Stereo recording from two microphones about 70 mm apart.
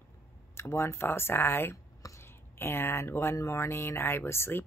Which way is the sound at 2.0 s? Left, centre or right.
Left.